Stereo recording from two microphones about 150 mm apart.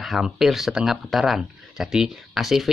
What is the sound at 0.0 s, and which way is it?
Speech, centre (ahead or behind).